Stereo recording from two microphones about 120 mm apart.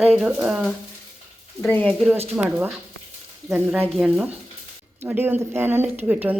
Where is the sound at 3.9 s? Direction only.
Centre (ahead or behind).